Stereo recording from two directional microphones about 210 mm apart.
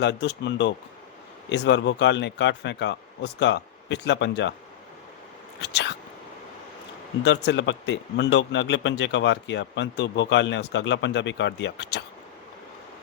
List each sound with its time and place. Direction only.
0.0 s speech: 55° left (ahead or behind)
7.3 s speech: 55° left (ahead or behind)